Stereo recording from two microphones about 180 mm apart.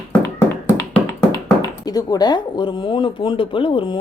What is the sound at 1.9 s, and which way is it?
Speech, 20° left (ahead or behind).